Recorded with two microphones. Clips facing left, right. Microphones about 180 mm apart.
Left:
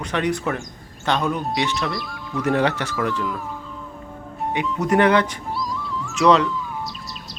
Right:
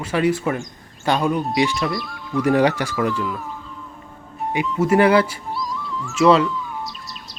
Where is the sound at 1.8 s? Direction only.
Centre (ahead or behind).